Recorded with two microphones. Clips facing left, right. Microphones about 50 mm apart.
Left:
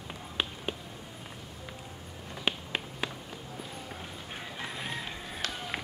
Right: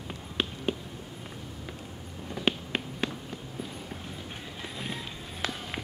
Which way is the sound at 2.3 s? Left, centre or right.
Centre.